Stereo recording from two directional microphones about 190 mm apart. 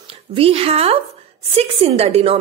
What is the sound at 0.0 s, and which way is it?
A woman's voice, 30° right (ahead or behind).